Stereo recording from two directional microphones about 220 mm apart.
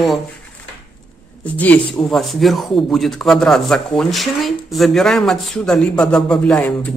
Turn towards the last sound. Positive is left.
turn(degrees=5)  # may be behind; listen again after turning